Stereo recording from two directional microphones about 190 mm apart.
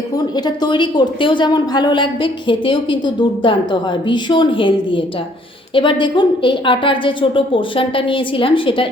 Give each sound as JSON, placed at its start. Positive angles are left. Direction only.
{"t": 0.3, "sound": "a woman's voice", "side_deg": 20}